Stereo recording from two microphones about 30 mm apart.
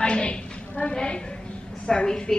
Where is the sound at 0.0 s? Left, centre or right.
Left.